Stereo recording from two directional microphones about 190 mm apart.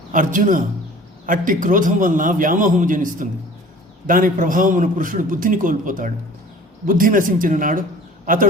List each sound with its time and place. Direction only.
0.1 s a man's voice: 45° right (ahead or behind)